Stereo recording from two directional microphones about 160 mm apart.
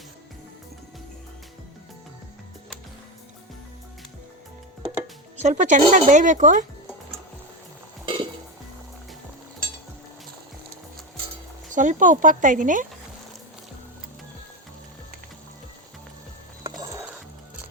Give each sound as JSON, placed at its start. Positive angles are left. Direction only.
{"t": 5.4, "sound": "speech", "side_deg": -50}
{"t": 8.0, "sound": "dishes", "side_deg": -30}
{"t": 11.7, "sound": "speech", "side_deg": -50}
{"t": 16.6, "sound": "music", "side_deg": -20}